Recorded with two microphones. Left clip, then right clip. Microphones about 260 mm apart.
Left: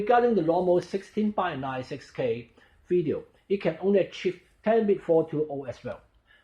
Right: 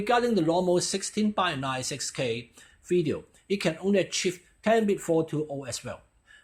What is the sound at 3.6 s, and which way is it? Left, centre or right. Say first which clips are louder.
Speech: left 2 dB; right.